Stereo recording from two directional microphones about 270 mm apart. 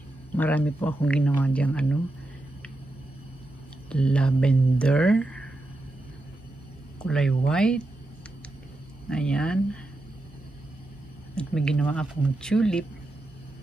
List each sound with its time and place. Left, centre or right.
0.4 s speech: centre
3.9 s speech: centre
7.0 s speech: centre
9.1 s speech: centre
11.3 s speech: centre